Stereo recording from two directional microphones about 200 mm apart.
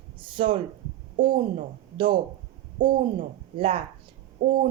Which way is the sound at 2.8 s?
40° right (ahead or behind).